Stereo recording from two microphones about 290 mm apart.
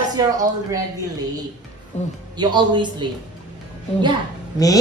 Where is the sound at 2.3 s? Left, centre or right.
Centre.